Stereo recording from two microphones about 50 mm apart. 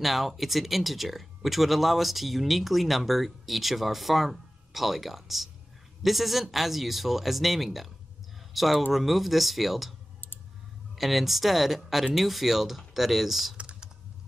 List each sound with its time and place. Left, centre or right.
0.0 s speech: centre
11.0 s speech: centre
13.6 s typing: right